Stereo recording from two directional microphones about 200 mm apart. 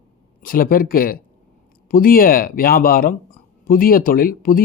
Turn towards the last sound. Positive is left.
turn(degrees=45)  # may be behind; listen again after turning